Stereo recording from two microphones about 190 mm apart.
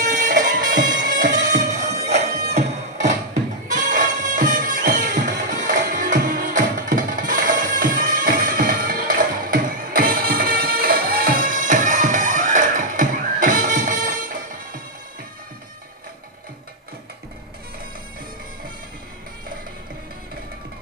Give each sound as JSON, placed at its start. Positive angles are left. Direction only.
{"t": 0.0, "sound": "music", "side_deg": -40}